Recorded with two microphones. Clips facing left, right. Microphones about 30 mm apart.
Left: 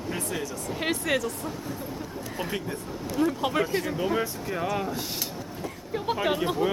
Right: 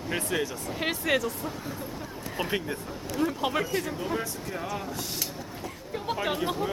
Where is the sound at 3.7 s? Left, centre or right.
Centre.